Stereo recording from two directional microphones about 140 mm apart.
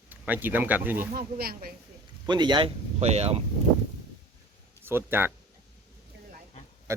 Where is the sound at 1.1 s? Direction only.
90° right.